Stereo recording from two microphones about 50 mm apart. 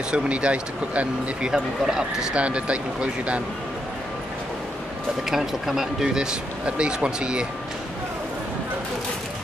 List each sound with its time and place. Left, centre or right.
0.1 s speech: right
1.5 s speech: centre
2.3 s speech: right
5.3 s speech: centre
6.6 s speech: right